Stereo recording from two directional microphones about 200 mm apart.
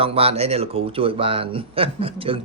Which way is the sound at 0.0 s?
30° right (ahead or behind).